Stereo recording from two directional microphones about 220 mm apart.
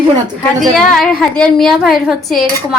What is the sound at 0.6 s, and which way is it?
A woman's voice, centre (ahead or behind).